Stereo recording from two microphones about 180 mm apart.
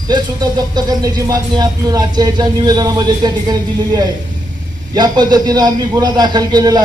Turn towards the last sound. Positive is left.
turn(degrees=-20)  # may be behind; listen again after turning